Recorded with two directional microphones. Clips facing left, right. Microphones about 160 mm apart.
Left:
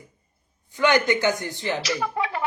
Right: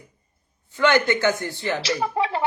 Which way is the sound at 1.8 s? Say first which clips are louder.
Right 3 dB; 30° right (ahead or behind).